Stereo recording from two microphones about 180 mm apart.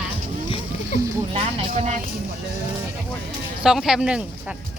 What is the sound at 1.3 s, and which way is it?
Speech, 40° right (ahead or behind).